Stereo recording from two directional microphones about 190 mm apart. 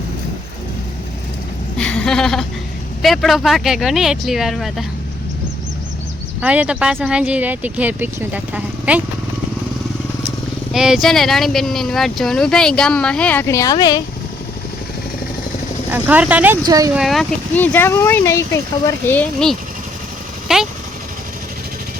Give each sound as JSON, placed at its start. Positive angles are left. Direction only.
{"t": 1.8, "sound": "a sound", "side_deg": 5}
{"t": 3.0, "sound": "speech", "side_deg": 0}
{"t": 6.4, "sound": "speech", "side_deg": -5}
{"t": 10.7, "sound": "speech", "side_deg": -5}
{"t": 15.9, "sound": "speech", "side_deg": -10}
{"t": 16.6, "sound": "speech", "side_deg": -20}
{"t": 16.9, "sound": "speech", "side_deg": 0}
{"t": 20.5, "sound": "vehicle", "side_deg": -5}